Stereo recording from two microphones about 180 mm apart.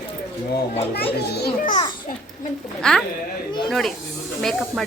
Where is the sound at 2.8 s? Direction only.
5° left (ahead or behind).